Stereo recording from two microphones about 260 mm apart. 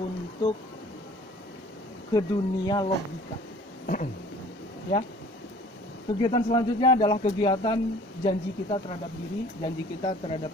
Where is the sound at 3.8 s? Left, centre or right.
Left.